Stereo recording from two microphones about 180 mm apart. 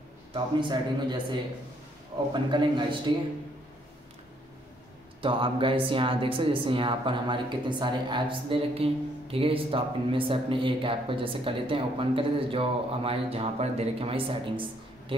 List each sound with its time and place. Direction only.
0.3 s speech: 25° right (ahead or behind)
5.2 s speech: 30° right (ahead or behind)